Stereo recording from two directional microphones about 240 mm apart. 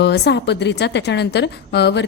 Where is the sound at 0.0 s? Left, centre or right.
Left.